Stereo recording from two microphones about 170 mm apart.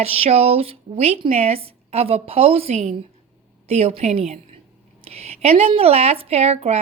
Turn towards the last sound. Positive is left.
turn(degrees=-40)  # may be behind; listen again after turning